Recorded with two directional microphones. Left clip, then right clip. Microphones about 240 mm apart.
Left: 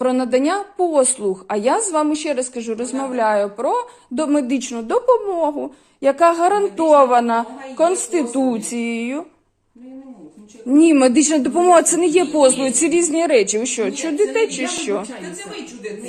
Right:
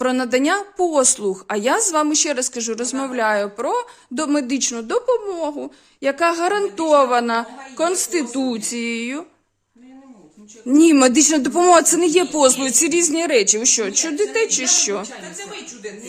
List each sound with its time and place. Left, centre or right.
0.0 s a woman's voice: right
10.7 s a man's voice: right